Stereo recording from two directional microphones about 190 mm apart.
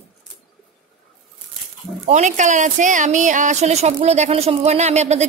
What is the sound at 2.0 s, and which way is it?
Speech, 40° right (ahead or behind).